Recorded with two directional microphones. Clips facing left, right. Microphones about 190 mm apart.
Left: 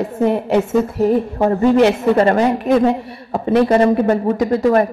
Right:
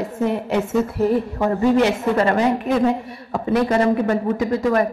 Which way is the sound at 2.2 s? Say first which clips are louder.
Left 4 dB; 35° left (ahead or behind).